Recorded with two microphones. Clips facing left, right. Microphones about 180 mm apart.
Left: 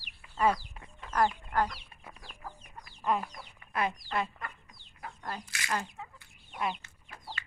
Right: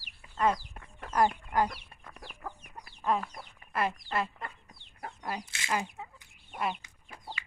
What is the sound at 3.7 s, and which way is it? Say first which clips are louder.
Speech: right 1 dB; centre (ahead or behind).